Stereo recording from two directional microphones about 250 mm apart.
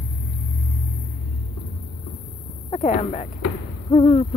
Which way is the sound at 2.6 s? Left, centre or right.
Left.